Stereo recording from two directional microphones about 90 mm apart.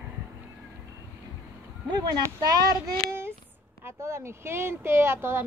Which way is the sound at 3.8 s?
30° right (ahead or behind).